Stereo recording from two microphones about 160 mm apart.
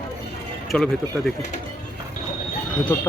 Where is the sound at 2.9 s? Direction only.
15° left (ahead or behind).